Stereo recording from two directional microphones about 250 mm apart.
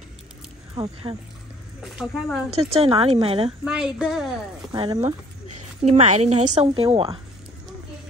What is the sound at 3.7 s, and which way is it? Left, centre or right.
Speech, centre.